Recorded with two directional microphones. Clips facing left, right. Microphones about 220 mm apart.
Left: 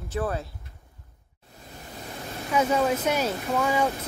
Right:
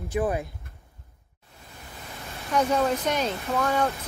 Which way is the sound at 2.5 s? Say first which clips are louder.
Even; 5° left (ahead or behind).